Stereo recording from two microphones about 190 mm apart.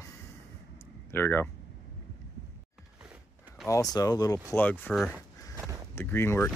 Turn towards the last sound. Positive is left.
turn(degrees=10)  # may be behind; listen again after turning